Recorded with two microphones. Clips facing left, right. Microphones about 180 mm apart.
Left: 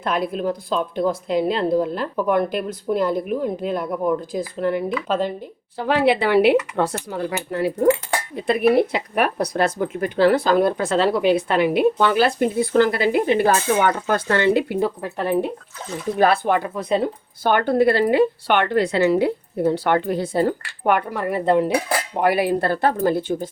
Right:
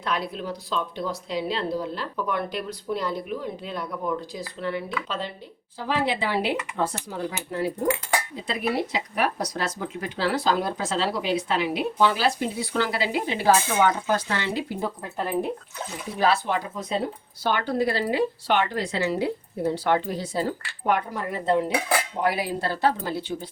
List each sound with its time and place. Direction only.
0.0 s speech: 50° left (ahead or behind)
5.7 s speech: 70° left (ahead or behind)
8.4 s speech: 60° left (ahead or behind)